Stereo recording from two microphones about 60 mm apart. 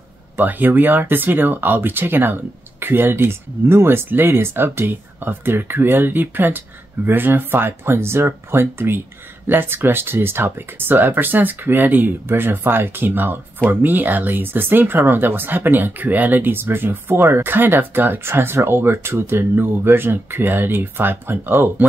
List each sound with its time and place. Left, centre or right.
0.4 s speech: right